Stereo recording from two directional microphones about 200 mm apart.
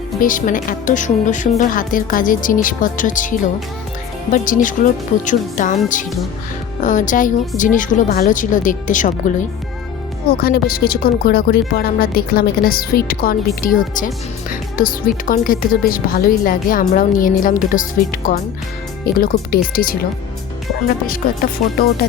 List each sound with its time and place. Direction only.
0.2 s speech: 40° left (ahead or behind)
6.8 s speech: 40° left (ahead or behind)
10.3 s a woman's voice: 50° left (ahead or behind)
21.6 s a woman's voice: 45° left (ahead or behind)